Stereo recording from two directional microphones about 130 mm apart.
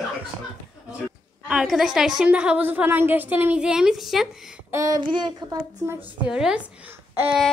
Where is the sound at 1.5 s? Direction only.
5° right (ahead or behind).